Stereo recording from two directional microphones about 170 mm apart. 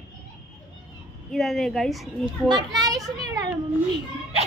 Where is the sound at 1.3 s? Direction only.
Centre (ahead or behind).